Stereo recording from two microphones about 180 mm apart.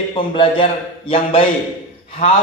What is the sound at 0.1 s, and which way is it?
A man's voice, 30° left (ahead or behind).